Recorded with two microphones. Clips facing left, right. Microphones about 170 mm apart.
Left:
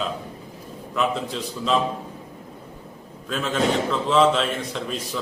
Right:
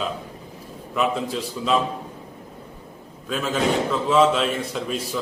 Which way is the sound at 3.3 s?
5° right (ahead or behind).